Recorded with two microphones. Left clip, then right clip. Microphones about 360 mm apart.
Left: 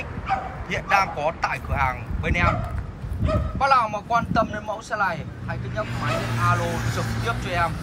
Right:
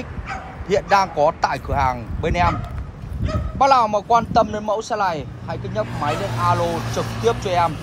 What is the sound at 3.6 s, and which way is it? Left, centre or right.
Speech, centre.